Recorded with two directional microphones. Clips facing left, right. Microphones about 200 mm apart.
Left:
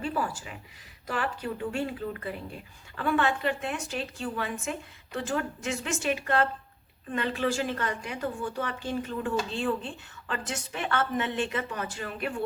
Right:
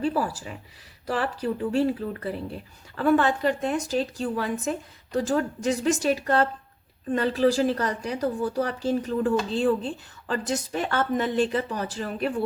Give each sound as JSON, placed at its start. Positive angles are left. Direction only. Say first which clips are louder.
{"t": 0.0, "sound": "a woman's voice", "louder": "right 5 dB", "side_deg": -35}